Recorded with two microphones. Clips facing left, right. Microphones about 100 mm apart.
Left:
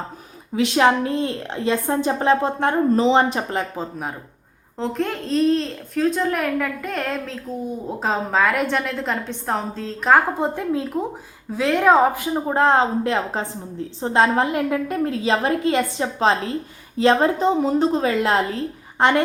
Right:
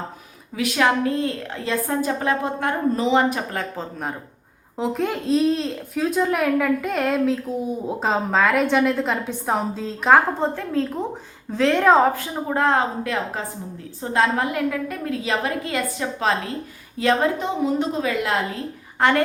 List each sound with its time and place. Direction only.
0.5 s a woman's voice: 25° left (ahead or behind)
4.8 s speech: 5° right (ahead or behind)
10.4 s a woman's voice: 15° left (ahead or behind)
12.2 s a woman's voice: 25° left (ahead or behind)
18.9 s a woman's voice: 20° left (ahead or behind)